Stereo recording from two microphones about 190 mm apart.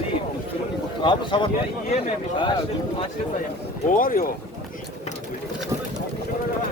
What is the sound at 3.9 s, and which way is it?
Speech, 45° left (ahead or behind).